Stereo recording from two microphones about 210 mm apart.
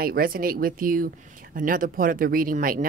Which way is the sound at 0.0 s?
45° right (ahead or behind).